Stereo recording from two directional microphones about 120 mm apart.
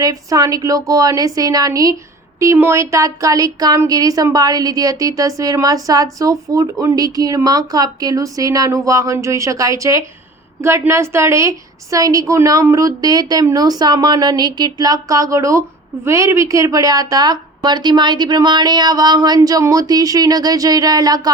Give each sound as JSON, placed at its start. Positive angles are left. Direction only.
{"t": 0.0, "sound": "a woman's voice", "side_deg": -30}